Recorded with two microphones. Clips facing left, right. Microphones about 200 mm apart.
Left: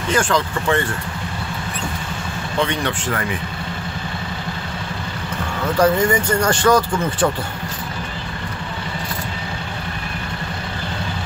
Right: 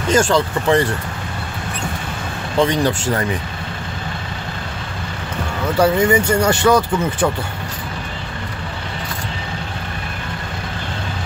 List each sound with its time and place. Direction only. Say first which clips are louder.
0.3 s speech: right 4 dB; 35° right (ahead or behind)
2.6 s speech: right 5 dB; 40° right (ahead or behind)
5.8 s speech: right 2 dB; 10° right (ahead or behind)